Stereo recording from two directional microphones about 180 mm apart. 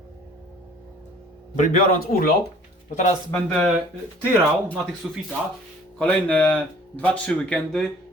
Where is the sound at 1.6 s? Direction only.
45° left (ahead or behind).